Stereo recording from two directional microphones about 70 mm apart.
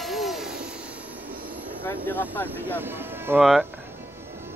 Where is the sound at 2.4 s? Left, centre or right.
Right.